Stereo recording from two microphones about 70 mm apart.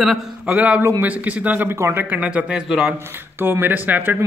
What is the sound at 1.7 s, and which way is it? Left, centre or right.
Speech, right.